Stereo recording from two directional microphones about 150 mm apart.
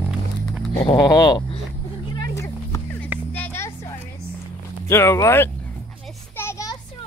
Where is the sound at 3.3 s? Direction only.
15° left (ahead or behind).